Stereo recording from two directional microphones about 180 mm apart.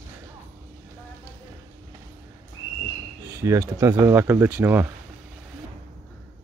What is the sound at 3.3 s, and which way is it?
Speech, 15° right (ahead or behind).